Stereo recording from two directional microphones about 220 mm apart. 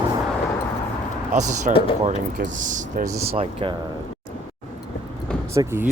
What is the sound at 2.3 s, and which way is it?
Speech, 35° right (ahead or behind).